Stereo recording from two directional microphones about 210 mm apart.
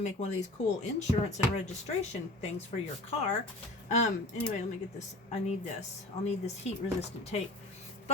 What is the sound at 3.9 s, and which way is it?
Speech, 35° left (ahead or behind).